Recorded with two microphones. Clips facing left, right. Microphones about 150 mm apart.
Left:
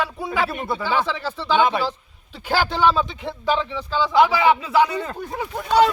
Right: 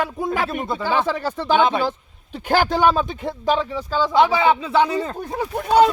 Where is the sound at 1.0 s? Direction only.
45° right (ahead or behind).